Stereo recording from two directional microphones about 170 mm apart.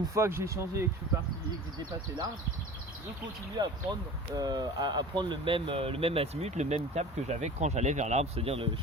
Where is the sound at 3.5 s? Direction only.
25° right (ahead or behind).